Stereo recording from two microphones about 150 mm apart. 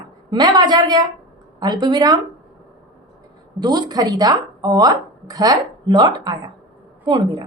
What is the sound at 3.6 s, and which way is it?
A woman's voice, 25° right (ahead or behind).